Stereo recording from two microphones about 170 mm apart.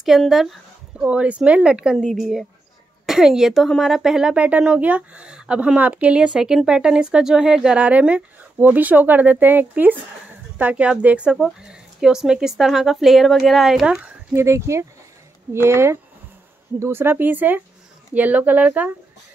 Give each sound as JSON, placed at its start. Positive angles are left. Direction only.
{"t": 0.0, "sound": "speech", "side_deg": 0}
{"t": 14.3, "sound": "speech", "side_deg": -15}